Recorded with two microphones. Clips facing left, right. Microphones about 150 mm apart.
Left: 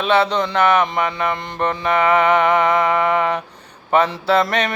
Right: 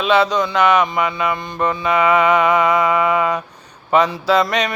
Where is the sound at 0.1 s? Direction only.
60° left (ahead or behind).